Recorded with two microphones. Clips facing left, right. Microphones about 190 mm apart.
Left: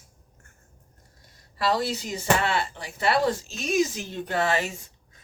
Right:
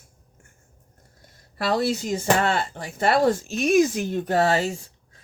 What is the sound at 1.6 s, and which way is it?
Speech, 50° right (ahead or behind).